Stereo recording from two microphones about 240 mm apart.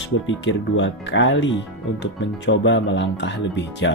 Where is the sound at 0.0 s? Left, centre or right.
Left.